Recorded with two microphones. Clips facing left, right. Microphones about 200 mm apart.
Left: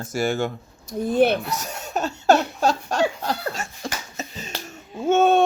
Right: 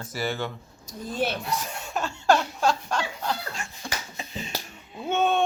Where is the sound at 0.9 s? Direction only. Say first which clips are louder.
Left 10 dB; 60° left (ahead or behind).